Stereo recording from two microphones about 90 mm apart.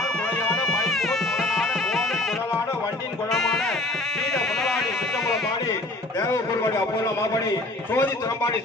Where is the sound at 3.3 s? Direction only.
Centre (ahead or behind).